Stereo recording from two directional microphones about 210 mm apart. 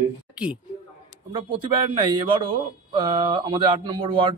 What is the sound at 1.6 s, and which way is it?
A man's voice, 20° right (ahead or behind).